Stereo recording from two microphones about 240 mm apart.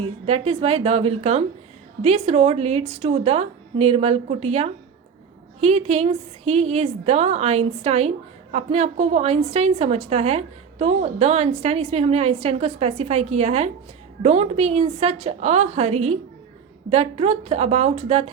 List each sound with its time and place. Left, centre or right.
0.0 s a woman's voice: right